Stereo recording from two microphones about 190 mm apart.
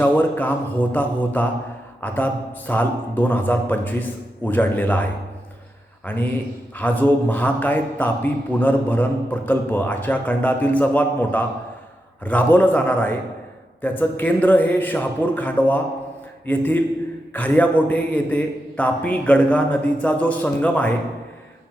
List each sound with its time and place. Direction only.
0.0 s a man's voice: 10° left (ahead or behind)
6.1 s a man's voice: 10° left (ahead or behind)